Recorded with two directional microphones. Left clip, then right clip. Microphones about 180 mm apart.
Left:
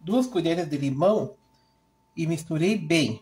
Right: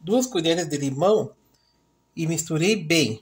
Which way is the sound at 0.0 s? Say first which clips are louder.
Right 3 dB; 40° right (ahead or behind).